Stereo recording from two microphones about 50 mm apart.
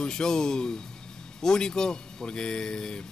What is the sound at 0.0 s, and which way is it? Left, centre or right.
Speech, centre.